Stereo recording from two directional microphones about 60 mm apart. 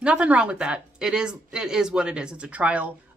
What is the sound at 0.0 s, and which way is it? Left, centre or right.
Speech, centre.